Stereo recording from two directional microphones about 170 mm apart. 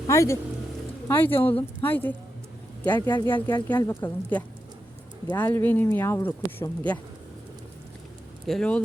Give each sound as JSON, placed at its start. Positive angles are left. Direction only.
{"t": 0.1, "sound": "speech", "side_deg": 15}
{"t": 8.4, "sound": "speech", "side_deg": 5}